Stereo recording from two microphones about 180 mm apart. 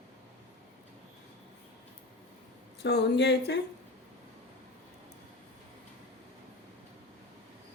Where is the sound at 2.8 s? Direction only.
70° left (ahead or behind).